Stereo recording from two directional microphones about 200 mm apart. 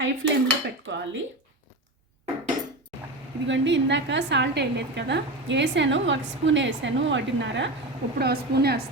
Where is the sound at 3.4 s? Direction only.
65° right (ahead or behind).